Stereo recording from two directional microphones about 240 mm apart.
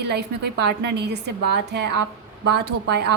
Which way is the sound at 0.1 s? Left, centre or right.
Right.